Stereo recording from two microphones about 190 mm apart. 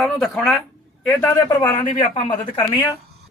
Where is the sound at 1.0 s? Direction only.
10° left (ahead or behind).